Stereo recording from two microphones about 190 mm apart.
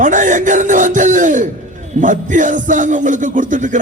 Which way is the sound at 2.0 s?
40° right (ahead or behind).